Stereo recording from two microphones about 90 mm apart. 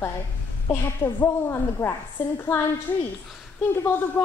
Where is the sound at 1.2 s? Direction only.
25° left (ahead or behind).